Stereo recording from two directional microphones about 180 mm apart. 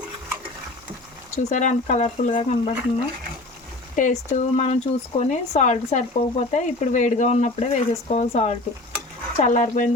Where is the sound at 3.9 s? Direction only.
45° left (ahead or behind).